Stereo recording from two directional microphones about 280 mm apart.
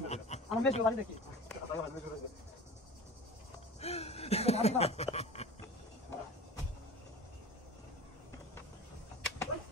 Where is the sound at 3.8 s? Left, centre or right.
Left.